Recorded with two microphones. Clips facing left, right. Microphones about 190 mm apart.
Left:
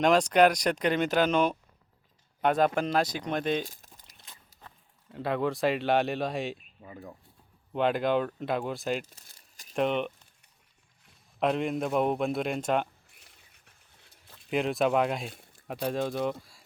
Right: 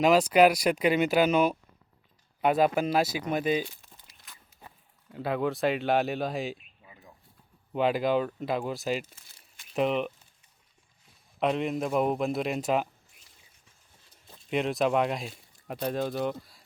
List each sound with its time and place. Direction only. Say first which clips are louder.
0.0 s a man's voice: right 1 dB; 5° right (ahead or behind)
3.7 s a sound: even; 40° left (ahead or behind)
4.6 s a sound: right 2 dB; 10° right (ahead or behind)
5.1 s a man's voice: even; centre (ahead or behind)
6.8 s speech: left 11 dB; 45° left (ahead or behind)
7.7 s a man's voice: right 1 dB; 5° right (ahead or behind)
9.1 s crumpling: left 1 dB; 40° left (ahead or behind)
9.7 s a man's voice: right 1 dB; centre (ahead or behind)
11.3 s a man's voice: even; centre (ahead or behind)
13.2 s a sound: left 1 dB; 65° left (ahead or behind)
14.5 s a man's voice: even; centre (ahead or behind)